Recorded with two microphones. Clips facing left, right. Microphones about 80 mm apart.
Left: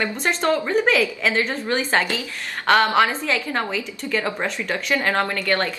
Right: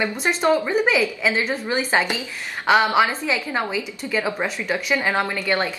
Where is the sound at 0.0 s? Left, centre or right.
Centre.